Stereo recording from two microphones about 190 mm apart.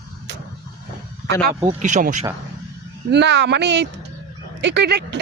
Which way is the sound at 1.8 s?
40° right (ahead or behind).